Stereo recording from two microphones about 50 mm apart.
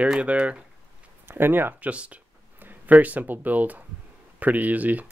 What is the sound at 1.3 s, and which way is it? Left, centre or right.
Speech, right.